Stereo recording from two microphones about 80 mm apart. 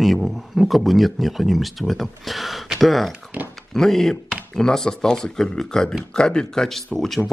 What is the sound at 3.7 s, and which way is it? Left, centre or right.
Speech, centre.